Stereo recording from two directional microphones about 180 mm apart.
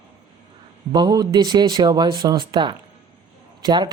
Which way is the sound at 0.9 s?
20° right (ahead or behind).